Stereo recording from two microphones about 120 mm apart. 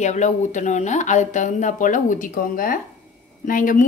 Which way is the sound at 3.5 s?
90° left.